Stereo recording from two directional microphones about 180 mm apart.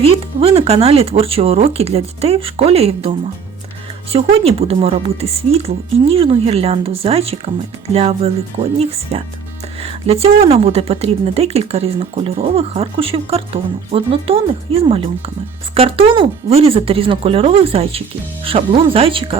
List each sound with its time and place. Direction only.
0.0 s speech: 30° right (ahead or behind)